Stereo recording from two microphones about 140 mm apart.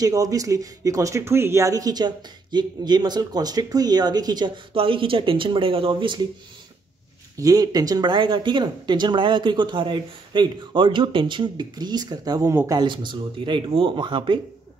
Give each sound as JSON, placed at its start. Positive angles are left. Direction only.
{"t": 0.0, "sound": "speech", "side_deg": -25}
{"t": 7.3, "sound": "speech", "side_deg": -25}